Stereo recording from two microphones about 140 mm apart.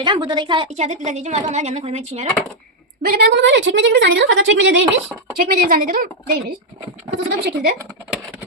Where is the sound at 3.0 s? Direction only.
90° right.